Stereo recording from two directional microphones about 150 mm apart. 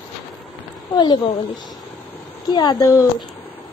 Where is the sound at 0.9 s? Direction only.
30° left (ahead or behind).